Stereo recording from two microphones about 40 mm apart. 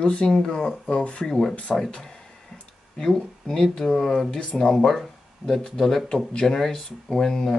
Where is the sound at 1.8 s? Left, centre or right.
Centre.